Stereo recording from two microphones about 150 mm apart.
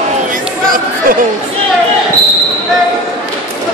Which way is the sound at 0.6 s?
70° right (ahead or behind).